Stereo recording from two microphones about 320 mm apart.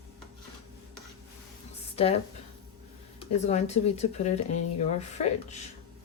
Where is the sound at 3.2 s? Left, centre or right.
Left.